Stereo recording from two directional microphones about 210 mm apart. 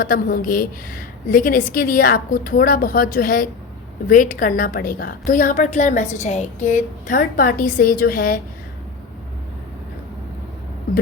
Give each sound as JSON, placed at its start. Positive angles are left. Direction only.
{"t": 0.0, "sound": "a woman's voice", "side_deg": 45}